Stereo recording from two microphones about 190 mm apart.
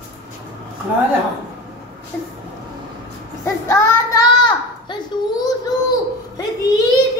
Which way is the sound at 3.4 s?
15° left (ahead or behind).